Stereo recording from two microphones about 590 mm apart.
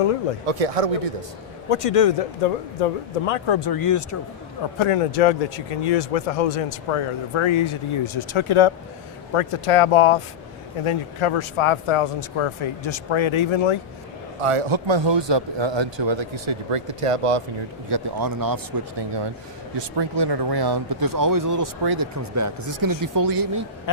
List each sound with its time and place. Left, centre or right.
0.4 s speech: right
1.7 s speech: left
5.1 s speech: left
14.4 s speech: right
17.8 s speech: right